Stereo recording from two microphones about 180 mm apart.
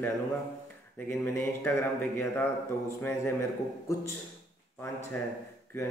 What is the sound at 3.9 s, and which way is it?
Speech, 15° left (ahead or behind).